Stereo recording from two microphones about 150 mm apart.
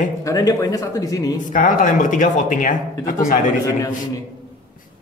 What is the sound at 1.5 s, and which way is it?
Speech, 60° left (ahead or behind).